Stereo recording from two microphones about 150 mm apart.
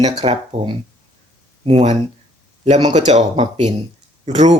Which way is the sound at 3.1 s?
45° right (ahead or behind).